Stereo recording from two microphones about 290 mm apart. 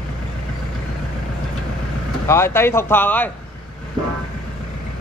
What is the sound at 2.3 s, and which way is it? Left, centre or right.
Speech, centre.